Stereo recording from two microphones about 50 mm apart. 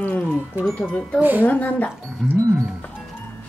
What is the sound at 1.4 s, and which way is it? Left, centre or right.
Speech, left.